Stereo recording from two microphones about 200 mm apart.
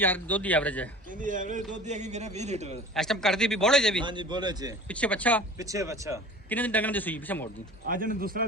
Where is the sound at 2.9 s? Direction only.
Centre (ahead or behind).